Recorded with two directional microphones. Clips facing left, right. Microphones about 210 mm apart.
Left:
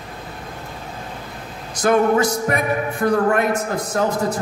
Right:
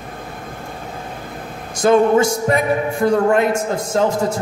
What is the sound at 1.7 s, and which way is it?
A man's voice, 25° right (ahead or behind).